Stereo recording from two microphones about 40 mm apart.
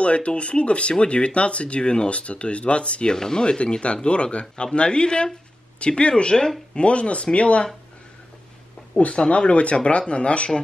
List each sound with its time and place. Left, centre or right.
0.0 s speech: left
8.9 s speech: left